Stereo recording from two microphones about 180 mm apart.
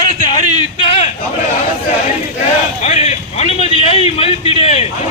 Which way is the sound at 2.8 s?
35° left (ahead or behind).